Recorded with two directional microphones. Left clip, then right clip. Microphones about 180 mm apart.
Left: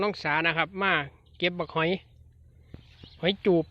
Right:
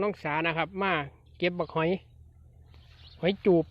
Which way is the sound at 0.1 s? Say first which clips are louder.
Left 3 dB; 5° left (ahead or behind).